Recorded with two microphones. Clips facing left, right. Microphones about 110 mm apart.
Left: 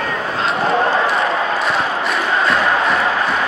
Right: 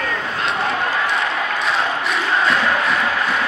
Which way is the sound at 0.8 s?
30° left (ahead or behind).